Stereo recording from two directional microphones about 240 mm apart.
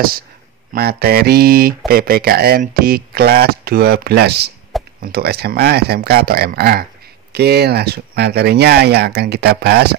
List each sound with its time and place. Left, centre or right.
0.7 s speech: right